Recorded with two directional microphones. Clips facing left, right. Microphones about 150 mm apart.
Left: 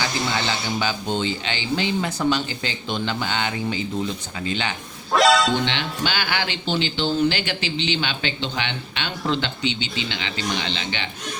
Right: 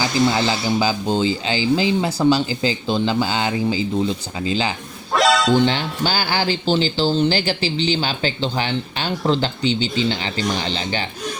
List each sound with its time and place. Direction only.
0.0 s speech: 35° right (ahead or behind)
5.1 s music: centre (ahead or behind)
5.6 s speech: 40° right (ahead or behind)